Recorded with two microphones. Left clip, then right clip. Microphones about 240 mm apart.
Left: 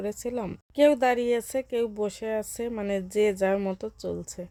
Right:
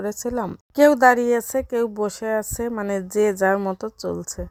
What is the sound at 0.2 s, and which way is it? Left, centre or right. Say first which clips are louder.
A woman's voice: right 6 dB; centre.